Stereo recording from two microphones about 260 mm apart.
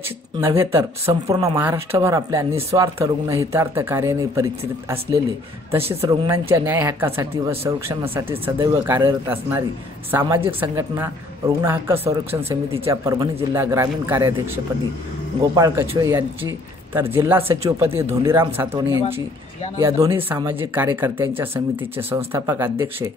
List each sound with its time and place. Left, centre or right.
0.4 s speech: centre
15.5 s speech: centre
19.8 s speech: centre